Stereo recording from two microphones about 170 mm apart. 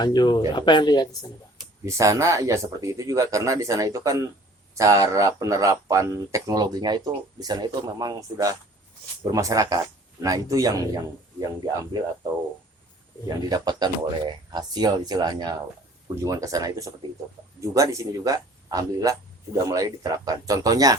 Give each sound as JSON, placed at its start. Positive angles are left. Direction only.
{"t": 0.0, "sound": "speech", "side_deg": 25}
{"t": 1.8, "sound": "speech", "side_deg": -15}
{"t": 13.2, "sound": "speech", "side_deg": -25}